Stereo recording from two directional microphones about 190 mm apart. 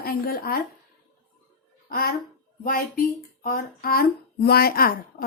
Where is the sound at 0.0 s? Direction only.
50° left (ahead or behind).